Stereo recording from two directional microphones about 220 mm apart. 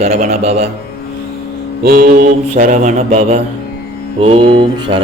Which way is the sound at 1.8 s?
45° right (ahead or behind).